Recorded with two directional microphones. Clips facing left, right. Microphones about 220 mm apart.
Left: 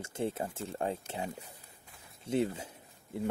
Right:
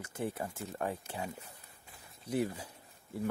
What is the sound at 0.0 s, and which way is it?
Speech, 25° left (ahead or behind).